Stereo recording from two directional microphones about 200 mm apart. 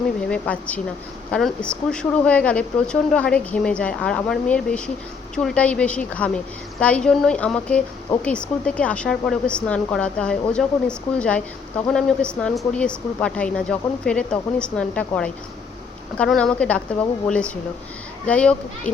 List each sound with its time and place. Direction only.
0.3 s a woman's voice: 5° left (ahead or behind)